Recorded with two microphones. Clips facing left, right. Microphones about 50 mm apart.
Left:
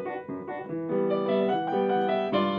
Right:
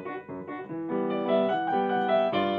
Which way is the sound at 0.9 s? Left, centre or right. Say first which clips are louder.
Even; centre.